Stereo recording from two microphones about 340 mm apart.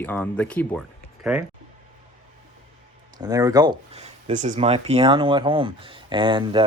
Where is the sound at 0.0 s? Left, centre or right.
Centre.